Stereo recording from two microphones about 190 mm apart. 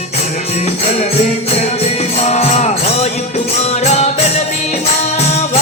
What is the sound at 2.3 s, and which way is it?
Music, 35° left (ahead or behind).